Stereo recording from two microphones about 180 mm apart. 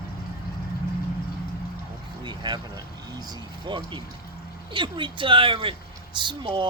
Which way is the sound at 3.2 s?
25° right (ahead or behind).